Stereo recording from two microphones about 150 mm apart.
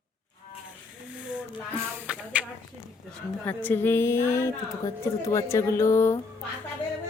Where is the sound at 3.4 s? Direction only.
10° left (ahead or behind).